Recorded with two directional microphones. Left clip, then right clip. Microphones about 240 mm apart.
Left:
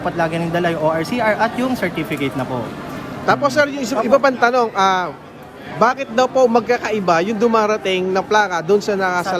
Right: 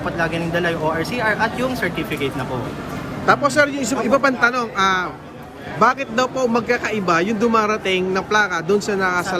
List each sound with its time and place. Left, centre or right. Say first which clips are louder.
0.0 s speech: left 2 dB; left
3.2 s a man's voice: even; centre